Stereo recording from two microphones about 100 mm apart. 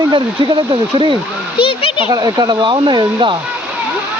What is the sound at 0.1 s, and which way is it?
Speech, 55° right (ahead or behind).